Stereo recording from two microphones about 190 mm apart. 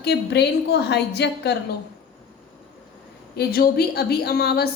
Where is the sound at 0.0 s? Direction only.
60° left (ahead or behind).